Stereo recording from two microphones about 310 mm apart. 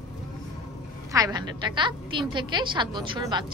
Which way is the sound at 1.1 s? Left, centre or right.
Centre.